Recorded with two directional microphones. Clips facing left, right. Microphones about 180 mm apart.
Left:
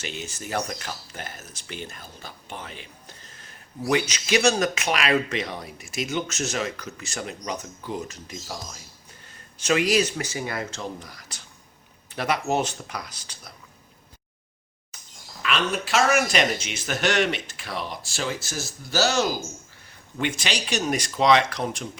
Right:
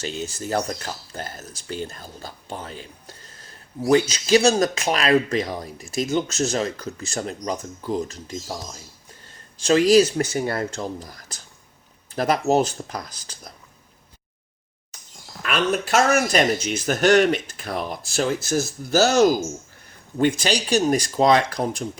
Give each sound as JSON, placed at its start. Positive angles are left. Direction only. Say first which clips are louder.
{"t": 0.0, "sound": "a man's voice", "louder": "right 6 dB", "side_deg": -35}
{"t": 9.6, "sound": "speech", "louder": "right 6 dB", "side_deg": -35}
{"t": 10.2, "sound": "speech", "louder": "right 6 dB", "side_deg": -45}
{"t": 15.4, "sound": "speech", "louder": "right 4 dB", "side_deg": -50}